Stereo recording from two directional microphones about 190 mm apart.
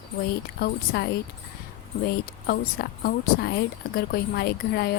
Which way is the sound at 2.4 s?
55° left (ahead or behind).